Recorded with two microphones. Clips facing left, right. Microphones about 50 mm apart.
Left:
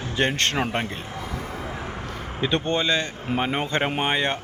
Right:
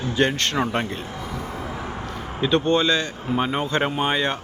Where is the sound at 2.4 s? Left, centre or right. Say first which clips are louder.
Right 4 dB; left.